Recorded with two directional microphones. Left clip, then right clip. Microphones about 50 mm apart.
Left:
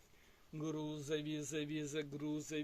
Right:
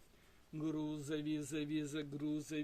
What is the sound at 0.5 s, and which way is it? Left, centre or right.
Speech, centre.